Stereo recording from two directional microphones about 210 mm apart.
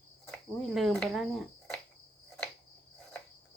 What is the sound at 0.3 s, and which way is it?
Cricket, centre (ahead or behind).